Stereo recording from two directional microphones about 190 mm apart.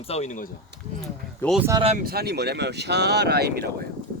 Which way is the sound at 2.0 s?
60° right (ahead or behind).